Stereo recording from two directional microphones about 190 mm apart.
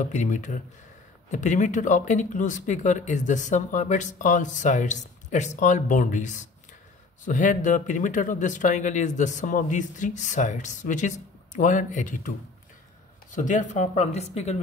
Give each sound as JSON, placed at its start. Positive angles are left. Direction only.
{"t": 0.0, "sound": "speech", "side_deg": 40}
{"t": 13.3, "sound": "speech", "side_deg": 40}